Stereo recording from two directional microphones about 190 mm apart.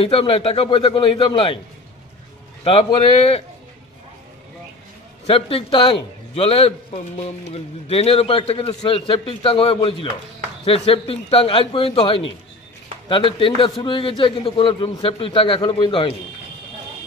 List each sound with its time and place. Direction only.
0.0 s a man's voice: 30° left (ahead or behind)
2.6 s a man's voice: 30° left (ahead or behind)
5.2 s a man's voice: 30° left (ahead or behind)